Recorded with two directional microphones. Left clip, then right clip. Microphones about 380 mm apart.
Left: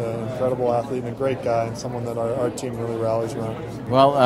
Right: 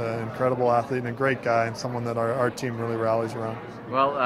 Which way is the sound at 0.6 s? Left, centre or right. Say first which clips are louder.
Left 1 dB; right.